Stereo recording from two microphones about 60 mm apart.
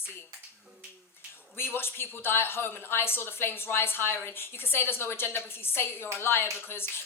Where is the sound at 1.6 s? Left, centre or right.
Left.